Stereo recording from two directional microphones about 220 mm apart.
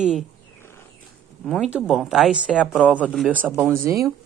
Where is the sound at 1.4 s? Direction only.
Centre (ahead or behind).